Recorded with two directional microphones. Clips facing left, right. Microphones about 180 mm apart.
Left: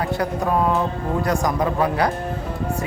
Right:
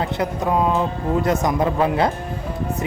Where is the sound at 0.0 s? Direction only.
20° right (ahead or behind).